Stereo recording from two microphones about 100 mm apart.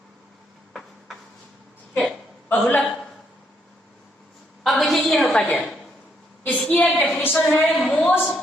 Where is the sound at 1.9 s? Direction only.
15° left (ahead or behind).